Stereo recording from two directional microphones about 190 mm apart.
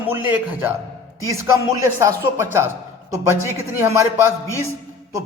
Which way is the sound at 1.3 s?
15° right (ahead or behind).